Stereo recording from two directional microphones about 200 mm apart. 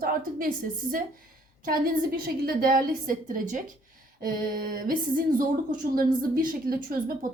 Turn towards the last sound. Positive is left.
turn(degrees=-45)  # may be behind; listen again after turning